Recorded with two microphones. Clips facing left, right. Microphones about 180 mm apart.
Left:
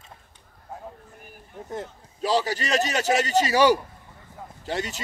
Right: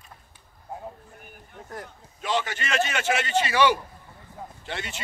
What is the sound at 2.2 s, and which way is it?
A man's voice, 35° left (ahead or behind).